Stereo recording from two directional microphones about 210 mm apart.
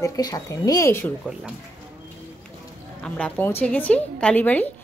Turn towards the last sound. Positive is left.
turn(degrees=10)  # may be behind; listen again after turning